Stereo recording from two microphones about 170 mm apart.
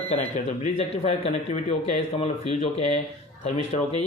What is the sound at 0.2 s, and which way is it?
Speech, 40° left (ahead or behind).